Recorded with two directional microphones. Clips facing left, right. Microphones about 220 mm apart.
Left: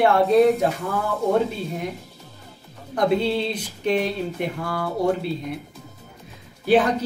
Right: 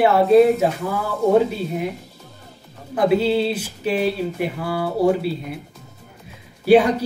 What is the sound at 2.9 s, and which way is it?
Speech, 5° right (ahead or behind).